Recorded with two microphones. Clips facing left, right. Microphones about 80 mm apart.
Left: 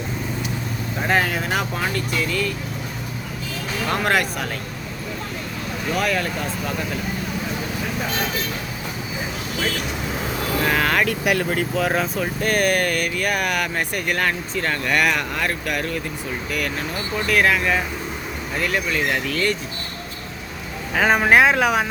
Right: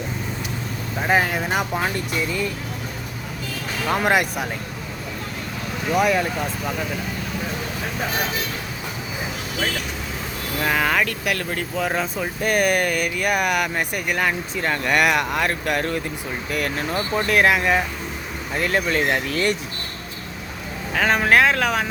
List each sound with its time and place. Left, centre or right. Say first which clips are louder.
1.0 s speech: right 1 dB; centre
3.8 s speech: right 1 dB; centre
5.9 s speech: right 4 dB; centre
10.7 s speech: right 1 dB; centre
11.0 s speech: left 4 dB; centre
12.4 s speech: right 1 dB; centre
18.5 s speech: right 2 dB; right
20.9 s speech: left 2 dB; centre